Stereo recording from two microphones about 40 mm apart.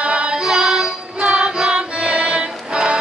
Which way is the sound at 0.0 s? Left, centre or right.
Right.